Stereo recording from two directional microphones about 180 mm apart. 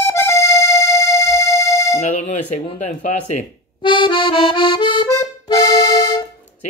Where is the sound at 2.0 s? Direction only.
40° left (ahead or behind).